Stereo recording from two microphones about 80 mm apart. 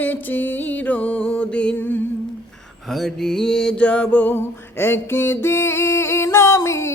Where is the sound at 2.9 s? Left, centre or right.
Centre.